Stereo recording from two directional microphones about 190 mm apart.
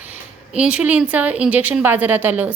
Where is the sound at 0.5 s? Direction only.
5° right (ahead or behind).